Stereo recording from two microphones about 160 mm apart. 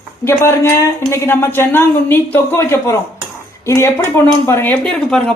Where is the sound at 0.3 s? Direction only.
15° left (ahead or behind).